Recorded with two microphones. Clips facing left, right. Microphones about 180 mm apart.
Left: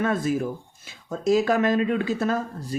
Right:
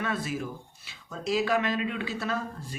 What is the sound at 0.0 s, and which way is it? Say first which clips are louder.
A woman's voice: left 8 dB; 45° left (ahead or behind).